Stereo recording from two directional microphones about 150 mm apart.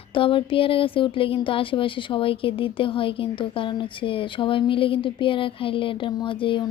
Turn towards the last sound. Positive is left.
turn(degrees=35)  # may be behind; listen again after turning